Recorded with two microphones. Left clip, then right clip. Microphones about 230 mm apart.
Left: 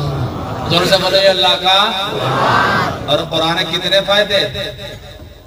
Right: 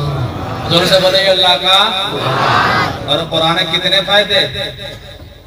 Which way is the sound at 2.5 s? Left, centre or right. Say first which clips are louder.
Right 2 dB; left.